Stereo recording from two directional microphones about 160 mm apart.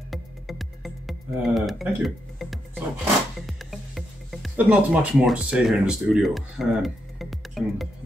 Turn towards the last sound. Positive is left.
turn(degrees=0)  # may be behind; listen again after turning